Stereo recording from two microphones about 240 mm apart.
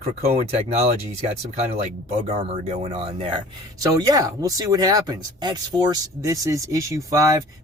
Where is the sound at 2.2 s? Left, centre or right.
Right.